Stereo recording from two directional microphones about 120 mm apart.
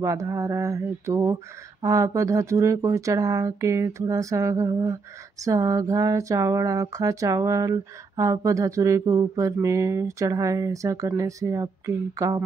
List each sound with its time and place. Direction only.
0.0 s speech: 25° right (ahead or behind)